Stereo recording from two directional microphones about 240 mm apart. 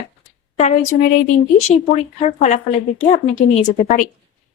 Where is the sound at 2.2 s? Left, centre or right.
Left.